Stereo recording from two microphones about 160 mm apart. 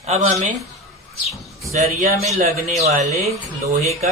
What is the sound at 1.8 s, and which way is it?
Mantra, 45° right (ahead or behind).